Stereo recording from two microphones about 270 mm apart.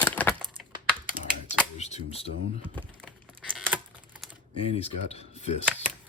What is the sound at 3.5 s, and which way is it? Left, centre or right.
Computer keyboard, centre.